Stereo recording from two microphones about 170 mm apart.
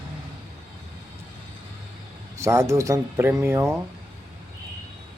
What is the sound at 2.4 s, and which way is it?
Speech, 15° right (ahead or behind).